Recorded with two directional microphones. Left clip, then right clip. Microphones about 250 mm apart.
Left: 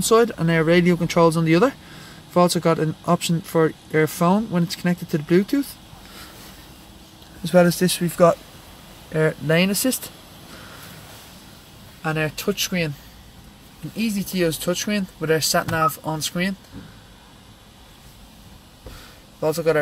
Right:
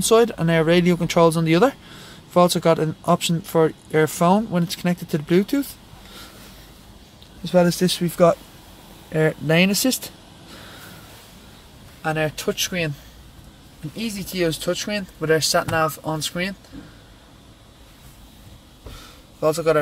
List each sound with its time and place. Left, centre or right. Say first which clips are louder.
0.0 s speech: right 1 dB; centre
7.4 s speech: left 1 dB; centre
12.0 s speech: right 1 dB; centre
13.9 s speech: left 1 dB; centre
19.4 s speech: right 1 dB; centre